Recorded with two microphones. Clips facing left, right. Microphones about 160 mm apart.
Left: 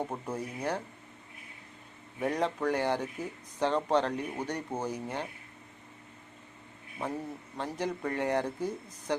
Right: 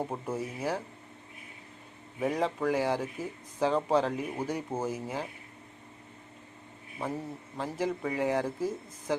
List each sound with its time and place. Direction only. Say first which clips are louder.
0.0 s speech: right 2 dB; 5° right (ahead or behind)
2.2 s speech: right 1 dB; 5° right (ahead or behind)
7.5 s speech: right 2 dB; centre (ahead or behind)